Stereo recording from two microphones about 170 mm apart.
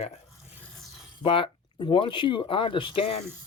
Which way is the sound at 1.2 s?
30° left (ahead or behind).